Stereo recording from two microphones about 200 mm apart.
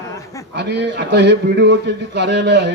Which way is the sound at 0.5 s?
60° right (ahead or behind).